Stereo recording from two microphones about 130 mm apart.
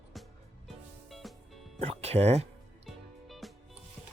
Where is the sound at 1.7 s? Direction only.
50° right (ahead or behind).